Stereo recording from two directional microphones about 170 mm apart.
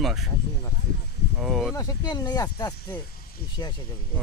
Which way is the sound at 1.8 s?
20° left (ahead or behind).